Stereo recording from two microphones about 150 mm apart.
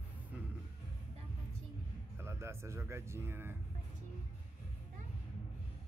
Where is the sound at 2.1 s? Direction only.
20° right (ahead or behind).